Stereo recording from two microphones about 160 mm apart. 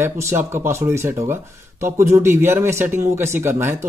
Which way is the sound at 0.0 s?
15° right (ahead or behind).